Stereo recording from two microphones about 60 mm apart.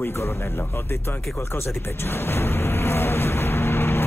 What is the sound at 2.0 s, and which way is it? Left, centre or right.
Music, left.